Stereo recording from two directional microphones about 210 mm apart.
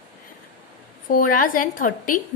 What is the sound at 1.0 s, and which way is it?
A woman's voice, 40° left (ahead or behind).